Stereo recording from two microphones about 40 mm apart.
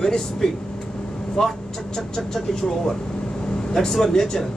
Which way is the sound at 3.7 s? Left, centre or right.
Centre.